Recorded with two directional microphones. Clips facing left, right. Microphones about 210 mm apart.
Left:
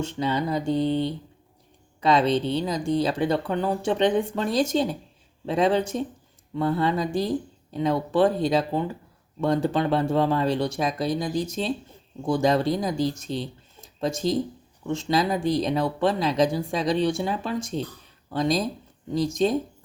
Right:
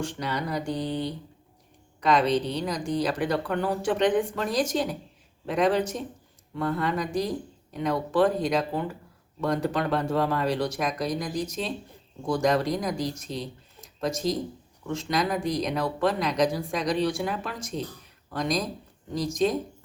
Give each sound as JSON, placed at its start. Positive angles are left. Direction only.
{"t": 0.0, "sound": "speech", "side_deg": 25}